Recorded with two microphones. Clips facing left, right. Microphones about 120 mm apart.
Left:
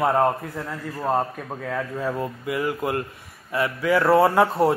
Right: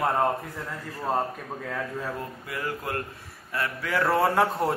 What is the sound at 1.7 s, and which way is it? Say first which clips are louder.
A man's voice: left 6 dB; 10° left (ahead or behind).